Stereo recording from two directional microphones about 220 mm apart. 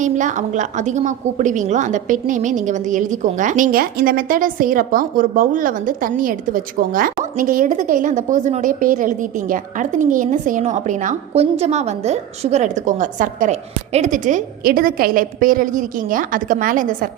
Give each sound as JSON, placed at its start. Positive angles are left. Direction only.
{"t": 0.0, "sound": "a woman's voice", "side_deg": -35}